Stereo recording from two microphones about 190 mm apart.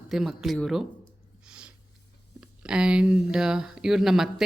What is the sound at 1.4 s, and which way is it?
Snort, 5° right (ahead or behind).